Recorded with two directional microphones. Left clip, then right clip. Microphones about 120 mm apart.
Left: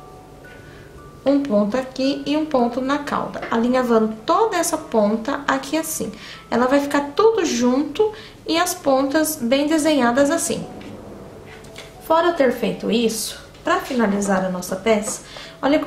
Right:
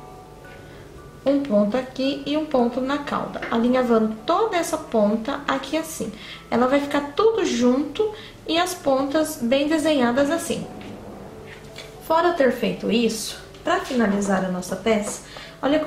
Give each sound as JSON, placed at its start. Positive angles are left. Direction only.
{"t": 1.4, "sound": "a woman's voice", "side_deg": 20}
{"t": 12.1, "sound": "a woman's voice", "side_deg": 10}